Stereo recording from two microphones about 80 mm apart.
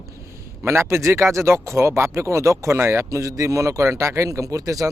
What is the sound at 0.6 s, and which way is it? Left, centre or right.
Speech, right.